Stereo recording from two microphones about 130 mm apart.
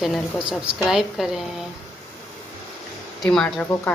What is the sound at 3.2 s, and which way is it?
Speech, 5° left (ahead or behind).